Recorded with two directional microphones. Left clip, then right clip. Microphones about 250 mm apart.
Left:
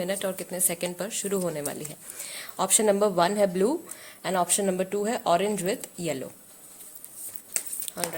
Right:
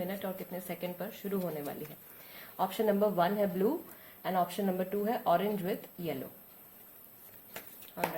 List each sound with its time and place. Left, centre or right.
0.0 s a woman's voice: left
7.9 s dog: left